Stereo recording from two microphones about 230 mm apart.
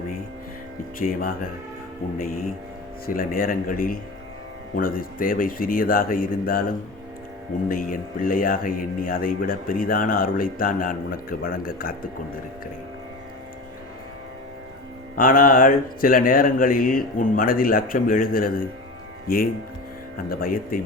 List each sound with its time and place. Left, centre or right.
0.9 s speech: left
7.7 s speech: left
15.2 s speech: left